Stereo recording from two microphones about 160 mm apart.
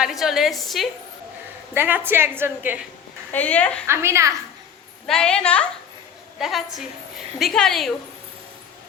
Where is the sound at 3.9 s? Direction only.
15° right (ahead or behind).